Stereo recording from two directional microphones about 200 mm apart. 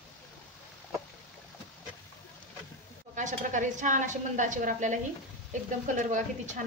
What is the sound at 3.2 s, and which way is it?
A woman's voice, 40° right (ahead or behind).